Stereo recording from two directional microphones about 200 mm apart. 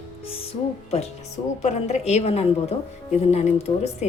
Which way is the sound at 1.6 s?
35° left (ahead or behind).